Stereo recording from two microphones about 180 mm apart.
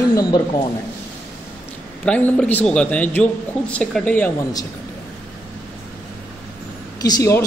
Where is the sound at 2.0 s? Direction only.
5° left (ahead or behind).